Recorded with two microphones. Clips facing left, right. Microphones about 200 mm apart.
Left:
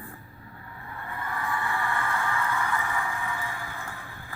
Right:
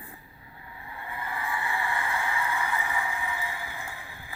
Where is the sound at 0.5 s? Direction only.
15° right (ahead or behind).